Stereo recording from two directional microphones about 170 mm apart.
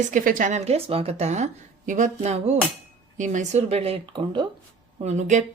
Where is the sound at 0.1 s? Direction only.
50° right (ahead or behind); by 4.4 s 30° right (ahead or behind).